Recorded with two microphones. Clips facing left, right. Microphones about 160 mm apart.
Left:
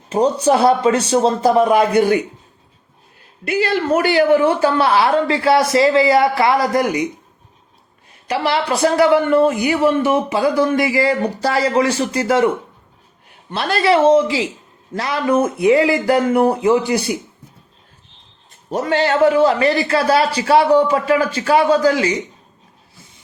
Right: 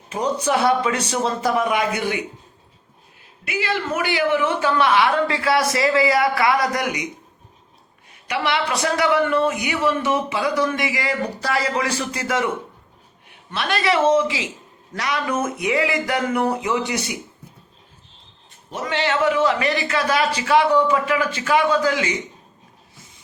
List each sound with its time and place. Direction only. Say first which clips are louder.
0.1 s a man's voice: left 7 dB; 30° left (ahead or behind)
2.0 s a man's voice: left 10 dB; 45° left (ahead or behind)
3.4 s a man's voice: left 7 dB; 40° left (ahead or behind)
8.3 s a man's voice: left 4 dB; 35° left (ahead or behind)
13.5 s a man's voice: left 5 dB; 30° left (ahead or behind)
18.7 s a man's voice: left 6 dB; 40° left (ahead or behind)